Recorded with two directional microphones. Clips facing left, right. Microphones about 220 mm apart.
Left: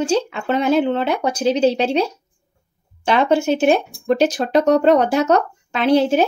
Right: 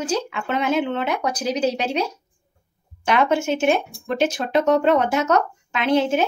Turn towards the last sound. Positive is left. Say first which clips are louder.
# left 4 dB
turn(degrees=35)  # may be behind; listen again after turning